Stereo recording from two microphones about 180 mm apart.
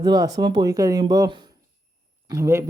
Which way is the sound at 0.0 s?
25° right (ahead or behind).